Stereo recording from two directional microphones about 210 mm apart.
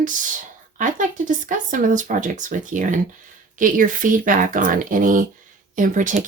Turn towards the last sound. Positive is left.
turn(degrees=-40)  # may be behind; listen again after turning